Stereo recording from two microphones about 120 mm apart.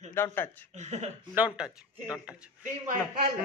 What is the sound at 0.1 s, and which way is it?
Speech, 20° left (ahead or behind).